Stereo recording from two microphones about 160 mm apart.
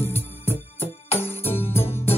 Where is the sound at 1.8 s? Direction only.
15° left (ahead or behind).